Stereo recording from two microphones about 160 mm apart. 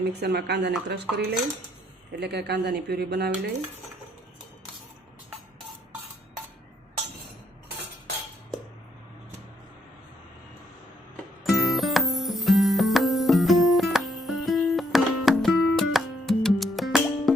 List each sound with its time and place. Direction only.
0.1 s speech: 90° right
1.1 s cutlery: 90° right
2.1 s speech: 90° right
11.4 s music: centre (ahead or behind)